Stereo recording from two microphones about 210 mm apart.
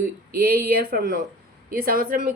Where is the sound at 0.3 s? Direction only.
45° right (ahead or behind).